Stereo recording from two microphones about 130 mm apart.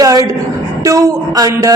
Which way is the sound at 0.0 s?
25° right (ahead or behind).